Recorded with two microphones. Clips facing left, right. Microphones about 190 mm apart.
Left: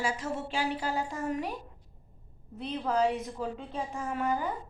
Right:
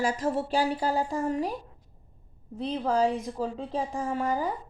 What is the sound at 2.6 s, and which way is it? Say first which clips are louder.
A woman's voice: right 3 dB; 35° right (ahead or behind).